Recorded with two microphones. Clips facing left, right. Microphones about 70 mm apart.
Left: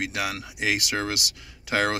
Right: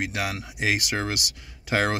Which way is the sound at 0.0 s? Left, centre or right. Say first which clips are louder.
Even; right.